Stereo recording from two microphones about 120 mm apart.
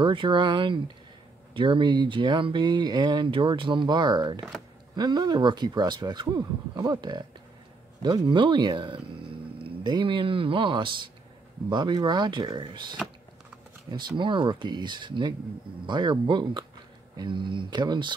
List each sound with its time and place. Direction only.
0.0 s speech: 45° right (ahead or behind)